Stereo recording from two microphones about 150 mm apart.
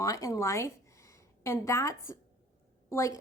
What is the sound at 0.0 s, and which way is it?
A woman's voice, 20° left (ahead or behind).